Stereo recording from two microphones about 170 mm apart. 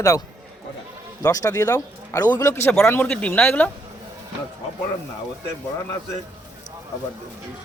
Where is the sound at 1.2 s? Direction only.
20° left (ahead or behind).